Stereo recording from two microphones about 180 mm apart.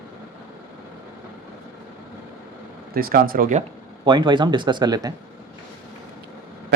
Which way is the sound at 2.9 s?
55° right (ahead or behind).